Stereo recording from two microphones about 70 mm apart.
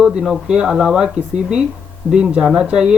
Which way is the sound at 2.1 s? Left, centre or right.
Centre.